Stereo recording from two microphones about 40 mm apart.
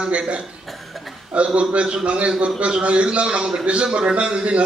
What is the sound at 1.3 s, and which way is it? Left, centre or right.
A man's voice, right.